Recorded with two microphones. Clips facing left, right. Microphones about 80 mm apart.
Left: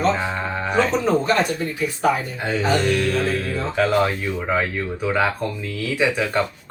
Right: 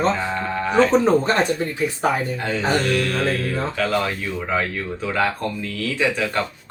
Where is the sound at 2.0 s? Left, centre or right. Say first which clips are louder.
Left 2 dB; right.